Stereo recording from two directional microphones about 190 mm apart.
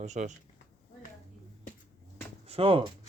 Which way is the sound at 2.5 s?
30° right (ahead or behind).